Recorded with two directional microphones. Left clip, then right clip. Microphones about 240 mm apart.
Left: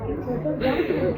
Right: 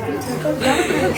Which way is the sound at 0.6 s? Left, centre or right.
Centre.